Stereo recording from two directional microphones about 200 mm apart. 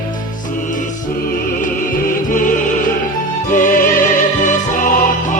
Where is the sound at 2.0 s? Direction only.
40° left (ahead or behind).